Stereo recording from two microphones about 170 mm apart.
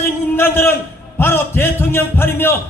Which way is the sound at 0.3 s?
15° left (ahead or behind).